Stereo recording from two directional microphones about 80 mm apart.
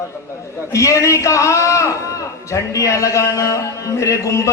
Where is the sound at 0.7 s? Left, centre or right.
Left.